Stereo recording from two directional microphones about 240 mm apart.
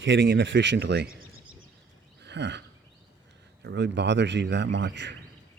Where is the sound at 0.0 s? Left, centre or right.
Right.